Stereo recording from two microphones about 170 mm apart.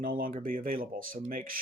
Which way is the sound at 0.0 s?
55° right (ahead or behind).